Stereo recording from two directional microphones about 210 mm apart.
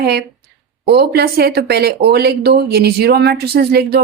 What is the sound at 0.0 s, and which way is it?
Speech, 50° right (ahead or behind).